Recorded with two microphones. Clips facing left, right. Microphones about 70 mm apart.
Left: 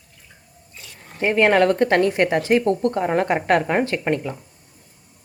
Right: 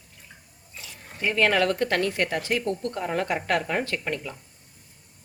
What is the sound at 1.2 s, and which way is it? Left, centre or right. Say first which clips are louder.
Speech: left 6 dB; left.